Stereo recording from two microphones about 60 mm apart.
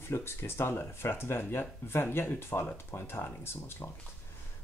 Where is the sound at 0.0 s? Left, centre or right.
Left.